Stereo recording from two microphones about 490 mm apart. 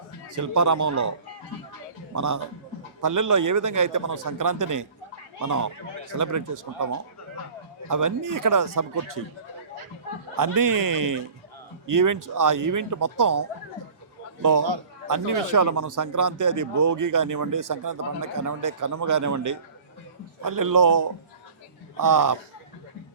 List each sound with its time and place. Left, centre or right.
0.3 s a man's voice: right
2.1 s a man's voice: right
7.9 s a man's voice: right
10.3 s a man's voice: right
15.0 s a man's voice: right